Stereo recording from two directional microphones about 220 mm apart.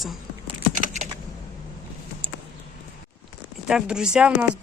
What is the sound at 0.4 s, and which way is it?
Typing, 30° right (ahead or behind).